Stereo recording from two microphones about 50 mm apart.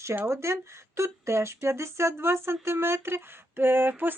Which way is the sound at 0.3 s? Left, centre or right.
Right.